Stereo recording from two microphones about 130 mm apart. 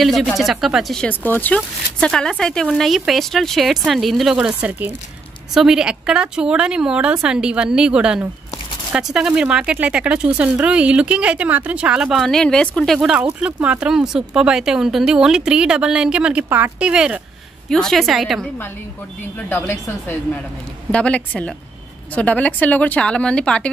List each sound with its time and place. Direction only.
0.0 s speech: centre (ahead or behind)
1.0 s speech: 15° left (ahead or behind); by 17.2 s 10° right (ahead or behind)
17.6 s speech: 5° left (ahead or behind)
19.5 s speech: 15° left (ahead or behind)